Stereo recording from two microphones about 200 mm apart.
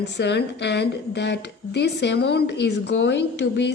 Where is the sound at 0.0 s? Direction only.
60° left (ahead or behind).